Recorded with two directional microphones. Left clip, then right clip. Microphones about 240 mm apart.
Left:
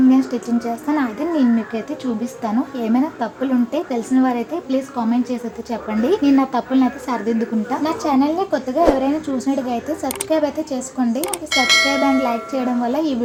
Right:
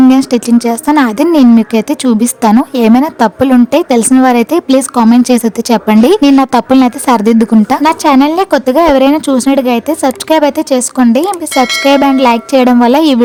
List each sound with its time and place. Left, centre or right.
0.1 s a woman's voice: right
7.8 s a woman's voice: right
11.5 s speech: centre
12.2 s a woman's voice: right